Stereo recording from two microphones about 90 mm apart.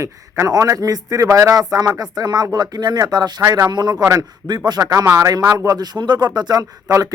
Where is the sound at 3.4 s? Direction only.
35° right (ahead or behind).